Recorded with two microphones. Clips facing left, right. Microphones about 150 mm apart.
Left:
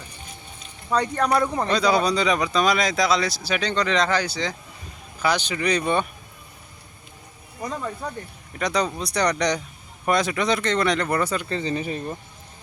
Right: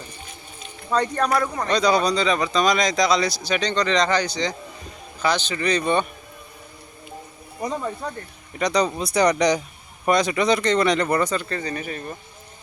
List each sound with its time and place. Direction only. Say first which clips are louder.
0.9 s speech: right 1 dB; 10° left (ahead or behind)
1.3 s speech: left 1 dB; 25° left (ahead or behind)
1.7 s speech: right 2 dB; 5° left (ahead or behind)
7.6 s speech: right 3 dB; 15° right (ahead or behind)
8.5 s speech: right 3 dB; centre (ahead or behind); by 12.1 s 25° left (ahead or behind)